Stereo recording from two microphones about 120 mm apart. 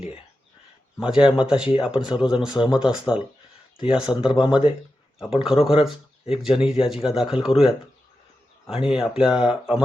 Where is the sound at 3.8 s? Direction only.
45° left (ahead or behind).